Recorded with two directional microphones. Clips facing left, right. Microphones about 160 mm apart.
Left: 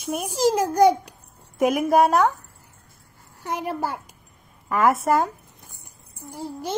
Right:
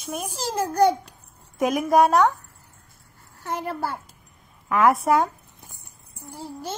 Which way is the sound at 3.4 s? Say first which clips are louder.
Left 1 dB; 15° left (ahead or behind).